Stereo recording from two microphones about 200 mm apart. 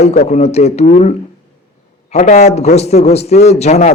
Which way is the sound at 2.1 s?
35° left (ahead or behind).